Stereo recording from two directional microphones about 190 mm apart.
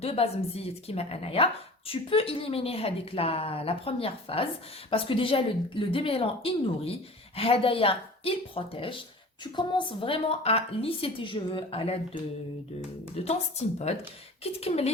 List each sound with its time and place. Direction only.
0.0 s a woman's voice: 30° left (ahead or behind)
13.2 s a woman's voice: 35° left (ahead or behind)